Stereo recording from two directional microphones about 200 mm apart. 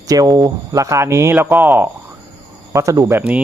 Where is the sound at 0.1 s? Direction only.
20° right (ahead or behind).